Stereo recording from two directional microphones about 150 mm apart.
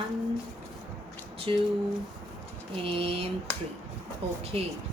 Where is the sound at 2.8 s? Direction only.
35° right (ahead or behind).